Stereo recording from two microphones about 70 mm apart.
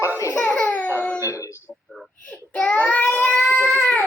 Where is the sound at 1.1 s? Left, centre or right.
Left.